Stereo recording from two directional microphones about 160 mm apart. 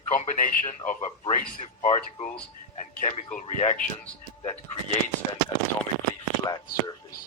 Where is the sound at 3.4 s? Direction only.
45° left (ahead or behind).